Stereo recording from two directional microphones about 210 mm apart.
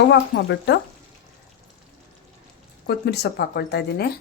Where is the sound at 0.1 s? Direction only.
55° left (ahead or behind).